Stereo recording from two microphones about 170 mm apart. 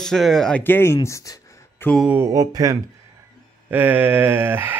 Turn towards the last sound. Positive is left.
turn(degrees=-15)  # may be behind; listen again after turning